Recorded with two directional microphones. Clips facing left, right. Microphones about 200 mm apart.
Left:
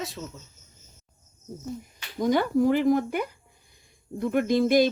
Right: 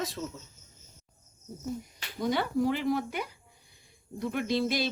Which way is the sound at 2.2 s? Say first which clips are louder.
Left 6 dB; 45° left (ahead or behind).